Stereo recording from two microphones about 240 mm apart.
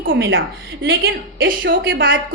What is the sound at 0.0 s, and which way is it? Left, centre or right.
A woman's voice, right.